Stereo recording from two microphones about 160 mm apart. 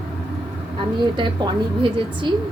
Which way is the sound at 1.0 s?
30° right (ahead or behind).